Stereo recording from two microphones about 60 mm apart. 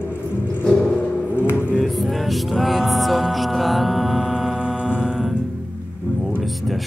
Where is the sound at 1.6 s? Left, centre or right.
Centre.